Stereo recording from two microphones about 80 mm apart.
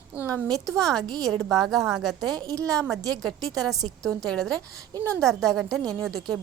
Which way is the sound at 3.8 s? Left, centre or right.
Centre.